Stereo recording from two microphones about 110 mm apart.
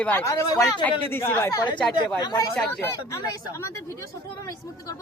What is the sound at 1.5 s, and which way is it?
Speech, 45° left (ahead or behind).